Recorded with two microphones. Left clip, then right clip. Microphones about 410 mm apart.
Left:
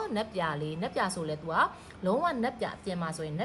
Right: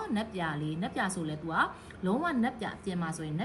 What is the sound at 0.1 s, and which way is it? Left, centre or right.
A woman's voice, centre.